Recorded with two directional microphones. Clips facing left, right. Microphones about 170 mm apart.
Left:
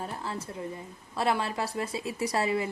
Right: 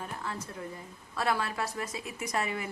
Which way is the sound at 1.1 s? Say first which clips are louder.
Left 3 dB; 25° left (ahead or behind).